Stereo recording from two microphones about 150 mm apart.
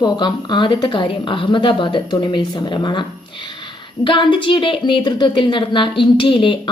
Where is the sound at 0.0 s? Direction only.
30° left (ahead or behind).